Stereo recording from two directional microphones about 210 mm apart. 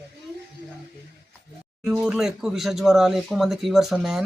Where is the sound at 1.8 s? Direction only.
5° right (ahead or behind).